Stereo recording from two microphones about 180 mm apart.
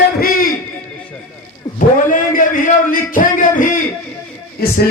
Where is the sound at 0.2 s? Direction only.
50° left (ahead or behind).